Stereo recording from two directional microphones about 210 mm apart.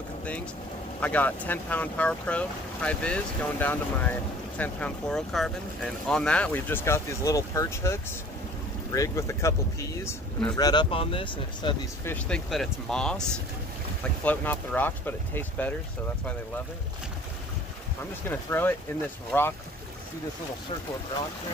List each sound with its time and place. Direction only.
1.0 s speech: 10° left (ahead or behind); by 11.7 s 25° left (ahead or behind)
12.0 s speech: 5° left (ahead or behind)
18.3 s speech: 10° left (ahead or behind)